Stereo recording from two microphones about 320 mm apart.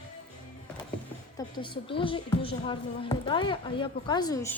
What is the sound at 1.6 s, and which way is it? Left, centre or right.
A woman's voice, centre.